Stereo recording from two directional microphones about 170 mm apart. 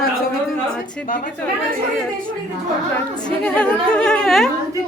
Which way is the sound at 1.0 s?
55° left (ahead or behind).